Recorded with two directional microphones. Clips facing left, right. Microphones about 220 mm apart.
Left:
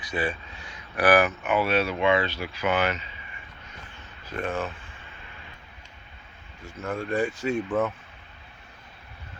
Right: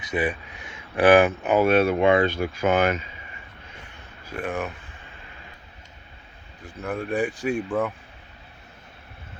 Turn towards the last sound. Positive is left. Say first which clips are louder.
# right 1 dB
turn(degrees=-15)  # may be behind; listen again after turning